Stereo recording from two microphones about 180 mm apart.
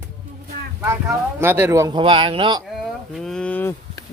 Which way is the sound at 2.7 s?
Centre (ahead or behind).